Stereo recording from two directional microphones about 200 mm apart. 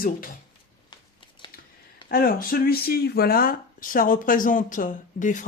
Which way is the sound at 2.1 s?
45° left (ahead or behind).